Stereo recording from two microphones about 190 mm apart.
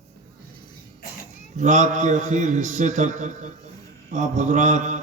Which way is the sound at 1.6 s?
40° right (ahead or behind).